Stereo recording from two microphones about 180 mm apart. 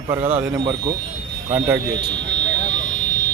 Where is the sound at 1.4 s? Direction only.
15° right (ahead or behind).